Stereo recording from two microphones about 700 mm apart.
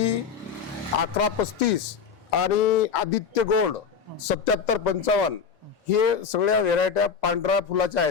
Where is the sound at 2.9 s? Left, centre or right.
Left.